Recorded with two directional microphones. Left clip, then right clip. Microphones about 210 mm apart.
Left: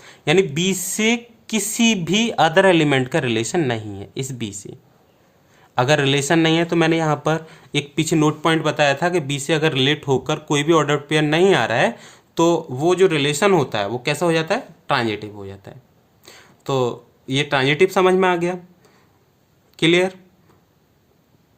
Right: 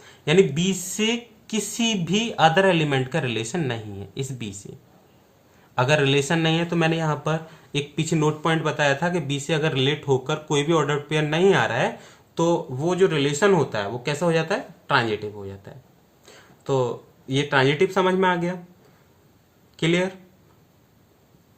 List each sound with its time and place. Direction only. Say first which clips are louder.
0.0 s speech: left 1 dB; 50° left (ahead or behind)
5.7 s speech: left 3 dB; 50° left (ahead or behind)
19.7 s speech: left 6 dB; 50° left (ahead or behind)